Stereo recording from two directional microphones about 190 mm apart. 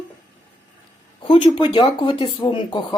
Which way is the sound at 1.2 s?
25° left (ahead or behind).